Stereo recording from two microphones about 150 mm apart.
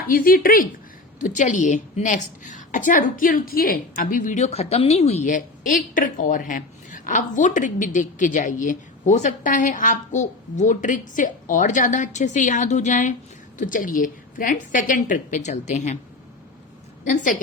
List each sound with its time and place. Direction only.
0.1 s speech: 70° left (ahead or behind)
1.2 s a woman's voice: 55° left (ahead or behind)
17.1 s a woman's voice: 55° left (ahead or behind)